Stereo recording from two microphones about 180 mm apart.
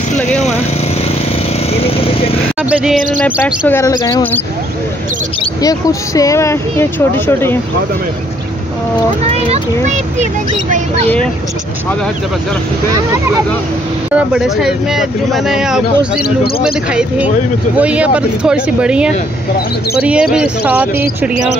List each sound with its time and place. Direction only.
1.7 s vehicle: 30° left (ahead or behind)
2.7 s speech: 5° right (ahead or behind)
3.2 s speech: 10° left (ahead or behind)
5.4 s speech: 20° left (ahead or behind)
14.1 s speech: 5° right (ahead or behind)
16.2 s speech: 60° left (ahead or behind)
17.7 s speech: 5° right (ahead or behind)